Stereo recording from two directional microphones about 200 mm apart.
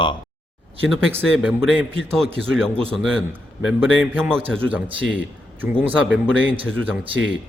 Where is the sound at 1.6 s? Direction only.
5° left (ahead or behind).